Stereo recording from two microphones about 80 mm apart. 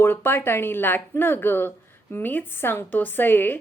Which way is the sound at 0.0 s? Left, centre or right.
Left.